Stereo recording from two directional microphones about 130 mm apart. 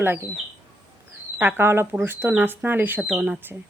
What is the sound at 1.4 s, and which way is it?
A woman's voice, 15° right (ahead or behind).